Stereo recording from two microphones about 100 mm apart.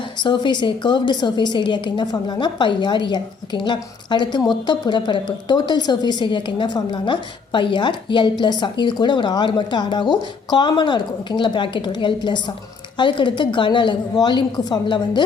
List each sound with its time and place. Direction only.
0.2 s a woman's voice: 50° left (ahead or behind)